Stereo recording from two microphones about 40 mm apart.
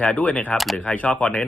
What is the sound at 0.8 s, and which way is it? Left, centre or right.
Speech, left.